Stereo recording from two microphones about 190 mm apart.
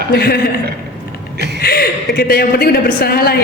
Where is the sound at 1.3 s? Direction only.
60° right (ahead or behind).